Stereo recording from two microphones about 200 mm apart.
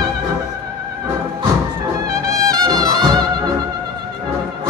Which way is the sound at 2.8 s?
20° right (ahead or behind).